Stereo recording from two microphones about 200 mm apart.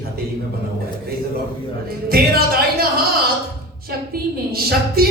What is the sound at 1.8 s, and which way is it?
Speech, 50° right (ahead or behind).